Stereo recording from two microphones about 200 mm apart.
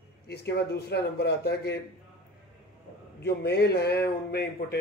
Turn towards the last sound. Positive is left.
turn(degrees=50)  # may be behind; listen again after turning